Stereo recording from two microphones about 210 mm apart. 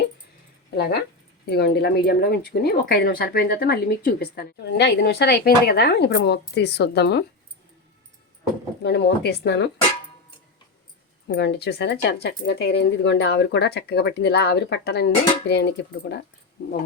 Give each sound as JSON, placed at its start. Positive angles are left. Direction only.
{"t": 1.5, "sound": "speech", "side_deg": 50}
{"t": 8.8, "sound": "speech", "side_deg": 50}
{"t": 11.3, "sound": "speech", "side_deg": 55}